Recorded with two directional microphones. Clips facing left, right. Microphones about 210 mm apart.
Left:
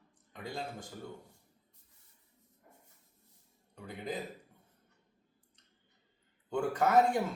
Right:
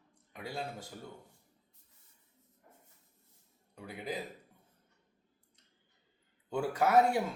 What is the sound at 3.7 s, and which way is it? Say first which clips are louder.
Speech: even; 10° right (ahead or behind).